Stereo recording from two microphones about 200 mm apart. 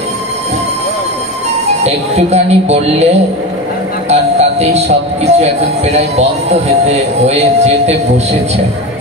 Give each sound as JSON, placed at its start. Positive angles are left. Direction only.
{"t": 1.8, "sound": "speech", "side_deg": -30}
{"t": 4.1, "sound": "speech", "side_deg": -30}